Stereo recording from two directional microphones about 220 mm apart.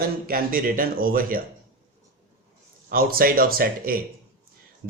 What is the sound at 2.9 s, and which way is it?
Speech, 40° right (ahead or behind).